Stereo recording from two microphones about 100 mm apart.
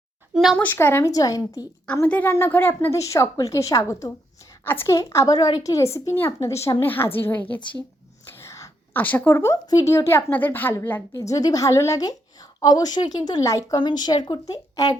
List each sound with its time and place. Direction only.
0.5 s a woman's voice: 20° left (ahead or behind)
1.1 s a woman's voice: 35° left (ahead or behind)
2.0 s a woman's voice: 15° left (ahead or behind)
3.0 s a woman's voice: 30° left (ahead or behind)
4.6 s a woman's voice: 25° left (ahead or behind)
8.3 s a sound: 25° left (ahead or behind)
8.9 s a woman's voice: 20° left (ahead or behind)
11.2 s a woman's voice: 35° left (ahead or behind)
13.7 s a woman's voice: 45° left (ahead or behind)